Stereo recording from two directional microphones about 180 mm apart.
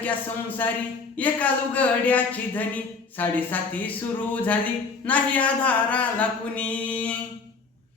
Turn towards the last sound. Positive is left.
turn(degrees=10)  # may be behind; listen again after turning